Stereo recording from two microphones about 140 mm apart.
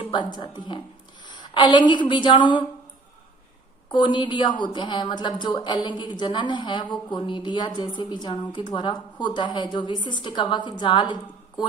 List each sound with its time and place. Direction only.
0.1 s a woman's voice: 30° left (ahead or behind)
3.8 s a woman's voice: 35° left (ahead or behind)